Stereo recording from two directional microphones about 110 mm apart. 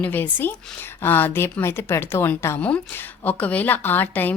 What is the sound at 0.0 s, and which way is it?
A woman's voice, 15° left (ahead or behind).